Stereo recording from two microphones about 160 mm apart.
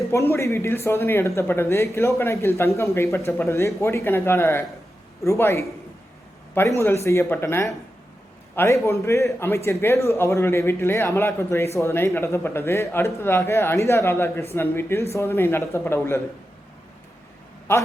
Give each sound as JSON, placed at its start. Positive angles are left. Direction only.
{"t": 0.1, "sound": "a man's voice", "side_deg": 15}
{"t": 17.7, "sound": "a man's voice", "side_deg": 15}